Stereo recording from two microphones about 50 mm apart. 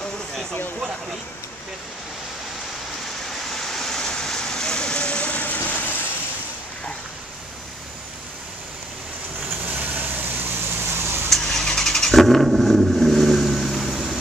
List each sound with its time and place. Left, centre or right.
3.5 s vehicle: centre; by 6.0 s left
9.7 s vehicle: right
10.9 s a sound: right
11.2 s vehicle: centre